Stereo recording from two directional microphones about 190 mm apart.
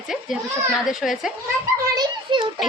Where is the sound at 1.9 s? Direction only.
20° right (ahead or behind).